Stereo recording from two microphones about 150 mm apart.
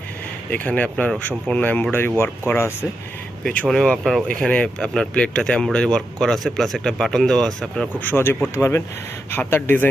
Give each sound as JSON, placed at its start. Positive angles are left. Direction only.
{"t": 0.5, "sound": "speech", "side_deg": 10}